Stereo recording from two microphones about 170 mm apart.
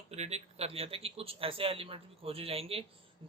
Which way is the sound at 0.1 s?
40° right (ahead or behind).